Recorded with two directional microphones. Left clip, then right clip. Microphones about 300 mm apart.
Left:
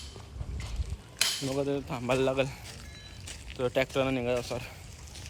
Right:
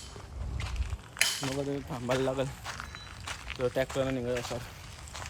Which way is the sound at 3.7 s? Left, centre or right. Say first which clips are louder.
Left 5 dB; centre.